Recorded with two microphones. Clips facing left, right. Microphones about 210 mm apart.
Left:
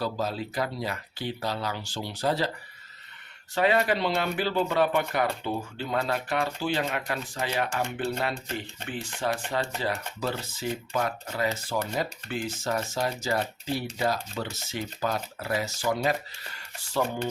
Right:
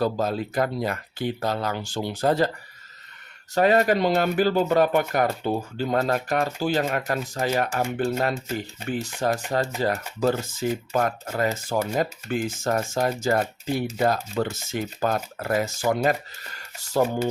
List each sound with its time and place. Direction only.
0.0 s speech: 50° right (ahead or behind)
3.5 s speech: 45° right (ahead or behind)